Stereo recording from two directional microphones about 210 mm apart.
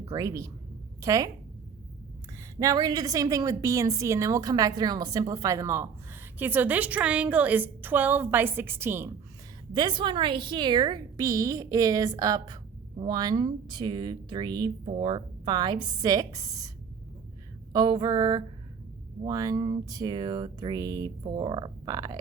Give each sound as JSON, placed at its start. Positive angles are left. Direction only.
{"t": 0.0, "sound": "a woman's voice", "side_deg": -15}
{"t": 2.6, "sound": "a woman's voice", "side_deg": -15}
{"t": 9.7, "sound": "speech", "side_deg": -20}